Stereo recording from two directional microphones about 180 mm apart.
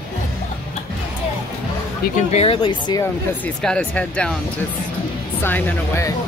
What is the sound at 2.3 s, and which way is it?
Speech, 30° left (ahead or behind).